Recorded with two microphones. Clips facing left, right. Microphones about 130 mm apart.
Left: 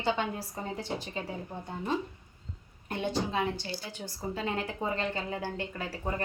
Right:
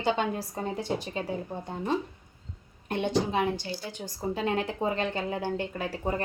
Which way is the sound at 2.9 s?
20° right (ahead or behind).